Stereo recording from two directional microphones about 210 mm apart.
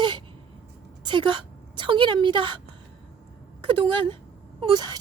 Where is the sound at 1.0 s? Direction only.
20° right (ahead or behind).